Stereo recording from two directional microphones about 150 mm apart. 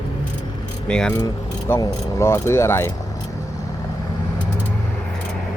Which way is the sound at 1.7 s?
20° left (ahead or behind).